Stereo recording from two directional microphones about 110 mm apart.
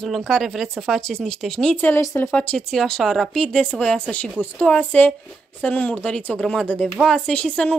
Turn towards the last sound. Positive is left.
turn(degrees=10)  # may be behind; listen again after turning